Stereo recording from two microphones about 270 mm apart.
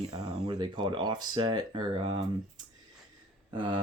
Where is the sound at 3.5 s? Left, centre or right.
Centre.